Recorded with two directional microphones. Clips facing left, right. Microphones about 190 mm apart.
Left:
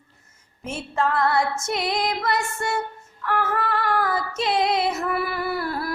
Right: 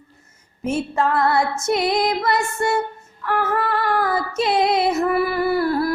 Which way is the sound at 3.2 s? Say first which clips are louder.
Right 3 dB; 10° right (ahead or behind).